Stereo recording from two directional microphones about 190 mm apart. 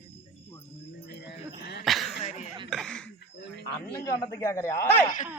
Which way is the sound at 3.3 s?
60° left (ahead or behind).